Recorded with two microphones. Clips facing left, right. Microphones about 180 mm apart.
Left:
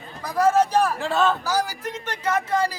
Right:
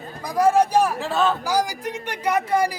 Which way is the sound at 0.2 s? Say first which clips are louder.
Right 1 dB; 15° right (ahead or behind).